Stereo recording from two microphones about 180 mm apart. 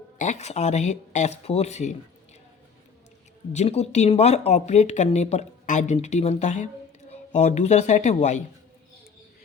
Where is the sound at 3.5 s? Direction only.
35° left (ahead or behind).